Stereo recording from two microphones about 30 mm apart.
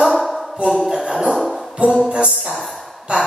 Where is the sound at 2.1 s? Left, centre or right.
Right.